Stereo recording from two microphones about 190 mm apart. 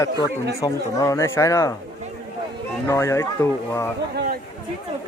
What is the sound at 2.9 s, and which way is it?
Speech, 15° left (ahead or behind).